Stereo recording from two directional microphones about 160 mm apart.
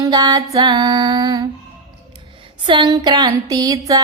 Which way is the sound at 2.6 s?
30° right (ahead or behind).